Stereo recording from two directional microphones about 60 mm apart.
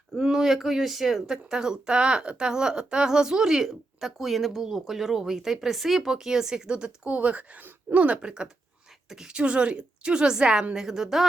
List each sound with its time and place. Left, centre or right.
0.2 s speech: centre